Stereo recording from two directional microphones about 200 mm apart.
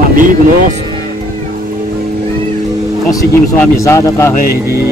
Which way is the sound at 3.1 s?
15° left (ahead or behind).